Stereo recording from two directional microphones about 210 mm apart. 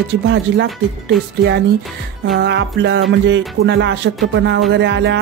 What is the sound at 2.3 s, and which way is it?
Music, 55° right (ahead or behind).